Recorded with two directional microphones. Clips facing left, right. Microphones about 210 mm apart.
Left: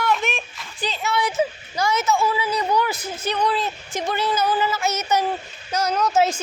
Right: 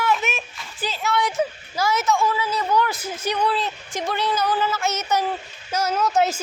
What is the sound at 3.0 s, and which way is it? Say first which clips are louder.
A woman's voice: even; 10° right (ahead or behind).